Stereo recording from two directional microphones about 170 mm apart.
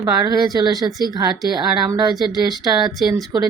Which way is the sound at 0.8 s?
Centre (ahead or behind).